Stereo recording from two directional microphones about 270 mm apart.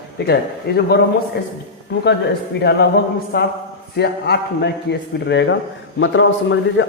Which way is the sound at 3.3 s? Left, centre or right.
Left.